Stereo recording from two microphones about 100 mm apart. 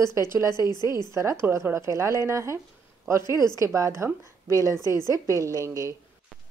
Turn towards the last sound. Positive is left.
turn(degrees=-30)  # may be behind; listen again after turning